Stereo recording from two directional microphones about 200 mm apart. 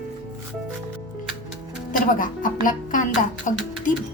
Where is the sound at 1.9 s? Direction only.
40° left (ahead or behind).